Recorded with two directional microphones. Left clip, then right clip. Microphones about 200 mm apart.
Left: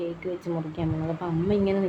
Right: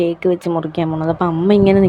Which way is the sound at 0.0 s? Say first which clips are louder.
Right 15 dB; 45° right (ahead or behind).